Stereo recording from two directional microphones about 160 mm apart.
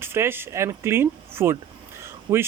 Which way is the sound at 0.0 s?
15° right (ahead or behind).